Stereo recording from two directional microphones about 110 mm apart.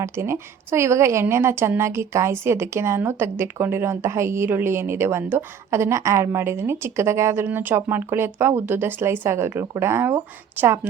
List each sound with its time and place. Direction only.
0.0 s a woman's voice: 25° right (ahead or behind)